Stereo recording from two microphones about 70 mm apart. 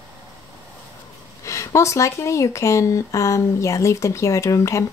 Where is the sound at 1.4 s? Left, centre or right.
Left.